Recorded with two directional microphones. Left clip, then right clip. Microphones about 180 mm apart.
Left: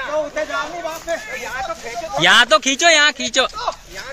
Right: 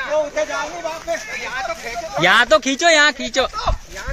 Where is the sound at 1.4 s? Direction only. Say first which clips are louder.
Right 1 dB; 35° left (ahead or behind).